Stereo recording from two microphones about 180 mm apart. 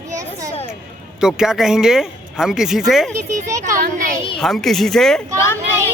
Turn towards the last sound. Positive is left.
turn(degrees=15)  # may be behind; listen again after turning